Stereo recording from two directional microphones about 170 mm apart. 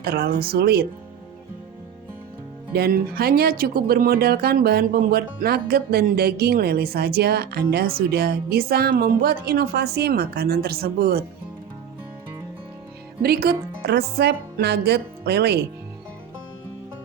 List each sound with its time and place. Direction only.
0.0 s a woman's voice: 70° right (ahead or behind)
2.7 s speech: 65° right (ahead or behind)
13.2 s a woman's voice: 65° right (ahead or behind)